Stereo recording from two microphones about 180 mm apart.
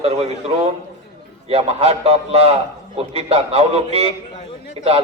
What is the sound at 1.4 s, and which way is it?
A man's voice, 35° right (ahead or behind).